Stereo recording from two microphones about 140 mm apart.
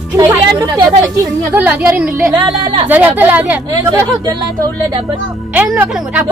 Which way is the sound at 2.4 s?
30° right (ahead or behind).